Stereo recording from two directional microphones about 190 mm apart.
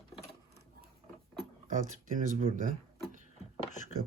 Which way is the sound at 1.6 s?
45° right (ahead or behind).